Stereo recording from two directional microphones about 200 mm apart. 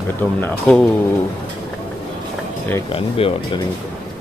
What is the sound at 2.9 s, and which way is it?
Speech, 30° left (ahead or behind).